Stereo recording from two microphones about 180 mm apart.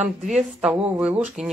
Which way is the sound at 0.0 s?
5° right (ahead or behind).